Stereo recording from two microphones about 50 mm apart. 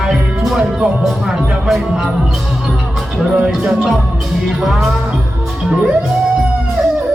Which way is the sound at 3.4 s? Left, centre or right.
Right.